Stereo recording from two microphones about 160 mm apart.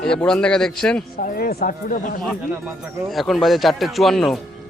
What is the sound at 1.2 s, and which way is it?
Speech, 65° left (ahead or behind).